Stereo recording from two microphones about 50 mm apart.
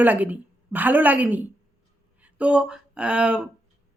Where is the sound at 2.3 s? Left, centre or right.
Right.